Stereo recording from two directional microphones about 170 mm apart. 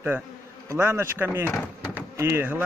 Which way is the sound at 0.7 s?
15° right (ahead or behind).